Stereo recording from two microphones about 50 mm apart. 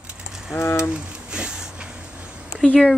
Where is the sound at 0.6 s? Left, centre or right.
Left.